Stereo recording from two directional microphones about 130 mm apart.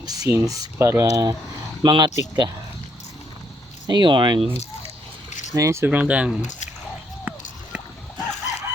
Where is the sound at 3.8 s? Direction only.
35° right (ahead or behind).